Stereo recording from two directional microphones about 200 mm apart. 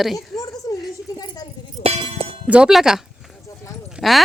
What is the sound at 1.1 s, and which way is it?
Keys jangling, 20° left (ahead or behind).